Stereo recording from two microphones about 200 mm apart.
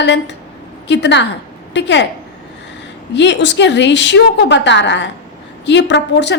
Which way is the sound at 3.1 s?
60° left (ahead or behind).